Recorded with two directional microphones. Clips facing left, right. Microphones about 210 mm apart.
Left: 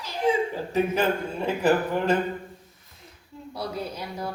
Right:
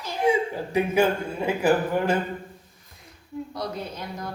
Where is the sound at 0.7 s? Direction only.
10° right (ahead or behind).